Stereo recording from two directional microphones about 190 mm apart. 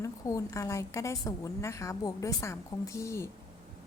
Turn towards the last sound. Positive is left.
turn(degrees=15)  # may be behind; listen again after turning